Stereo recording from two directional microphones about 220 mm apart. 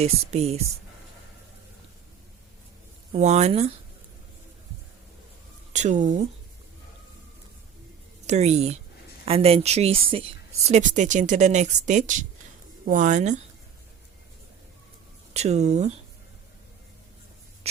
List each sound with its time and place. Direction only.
0.0 s a woman's voice: 30° right (ahead or behind)
3.1 s a woman's voice: 30° right (ahead or behind)
5.7 s speech: 35° right (ahead or behind)
8.3 s a woman's voice: 30° right (ahead or behind)
15.3 s speech: 30° right (ahead or behind)